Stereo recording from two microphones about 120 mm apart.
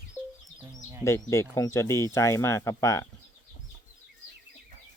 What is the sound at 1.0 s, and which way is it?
Speech, 20° left (ahead or behind).